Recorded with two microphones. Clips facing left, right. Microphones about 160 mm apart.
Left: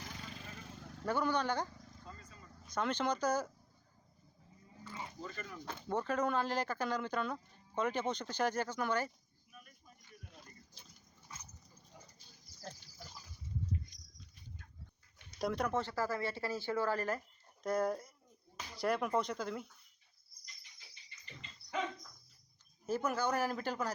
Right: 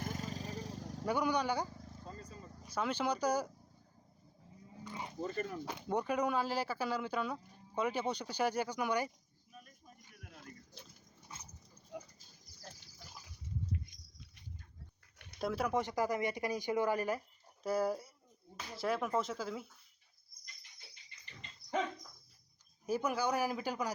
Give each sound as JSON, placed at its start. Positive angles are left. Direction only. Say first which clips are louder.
{"t": 0.0, "sound": "vehicle", "louder": "right 8 dB", "side_deg": -45}
{"t": 1.0, "sound": "speech", "louder": "right 1 dB", "side_deg": -15}
{"t": 2.0, "sound": "vehicle", "louder": "right 6 dB", "side_deg": -35}
{"t": 2.6, "sound": "speech", "louder": "even", "side_deg": -10}
{"t": 4.8, "sound": "a sound", "louder": "right 2 dB", "side_deg": -15}
{"t": 5.2, "sound": "speech", "louder": "right 12 dB", "side_deg": -40}
{"t": 5.6, "sound": "speech", "louder": "left 2 dB", "side_deg": -15}
{"t": 10.8, "sound": "pig", "louder": "right 6 dB", "side_deg": -60}
{"t": 15.4, "sound": "speech", "louder": "right 1 dB", "side_deg": -5}
{"t": 22.9, "sound": "speech", "louder": "right 1 dB", "side_deg": -10}